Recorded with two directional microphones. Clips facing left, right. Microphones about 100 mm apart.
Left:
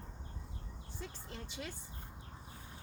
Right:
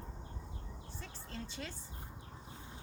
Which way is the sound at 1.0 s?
15° left (ahead or behind).